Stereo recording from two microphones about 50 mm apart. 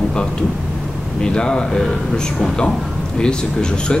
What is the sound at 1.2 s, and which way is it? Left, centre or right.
Speech, centre.